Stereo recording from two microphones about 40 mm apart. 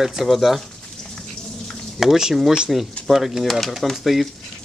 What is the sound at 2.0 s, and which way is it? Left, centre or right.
Speech, centre.